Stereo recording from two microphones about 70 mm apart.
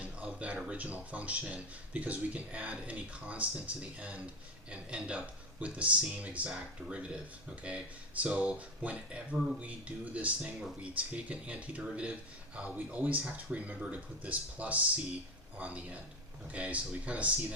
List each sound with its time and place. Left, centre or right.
0.0 s speech: centre